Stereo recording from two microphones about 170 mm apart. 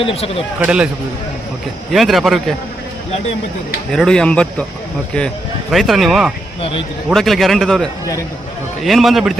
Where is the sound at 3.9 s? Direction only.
5° left (ahead or behind).